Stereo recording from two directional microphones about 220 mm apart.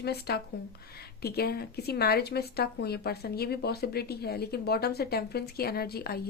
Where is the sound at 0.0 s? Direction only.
45° left (ahead or behind).